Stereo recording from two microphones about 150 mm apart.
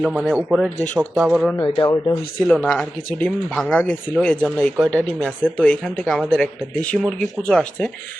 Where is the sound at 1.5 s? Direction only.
30° left (ahead or behind).